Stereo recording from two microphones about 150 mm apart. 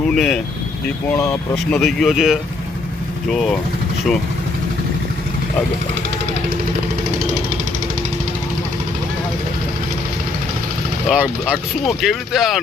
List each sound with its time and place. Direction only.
0.1 s speech: centre (ahead or behind)
1.1 s speech: 20° left (ahead or behind)
1.7 s speech: centre (ahead or behind)
11.1 s speech: 5° right (ahead or behind)